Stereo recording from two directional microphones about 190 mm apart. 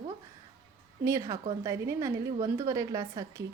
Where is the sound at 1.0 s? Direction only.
15° right (ahead or behind).